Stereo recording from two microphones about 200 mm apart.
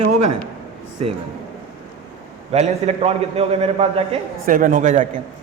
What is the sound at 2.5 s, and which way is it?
A man's voice, 35° right (ahead or behind).